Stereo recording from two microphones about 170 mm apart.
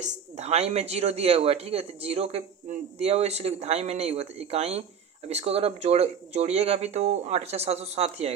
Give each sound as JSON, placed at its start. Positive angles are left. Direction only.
{"t": 0.0, "sound": "speech", "side_deg": -40}